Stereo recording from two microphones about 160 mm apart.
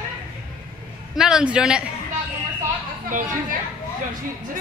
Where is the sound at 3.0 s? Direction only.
55° right (ahead or behind).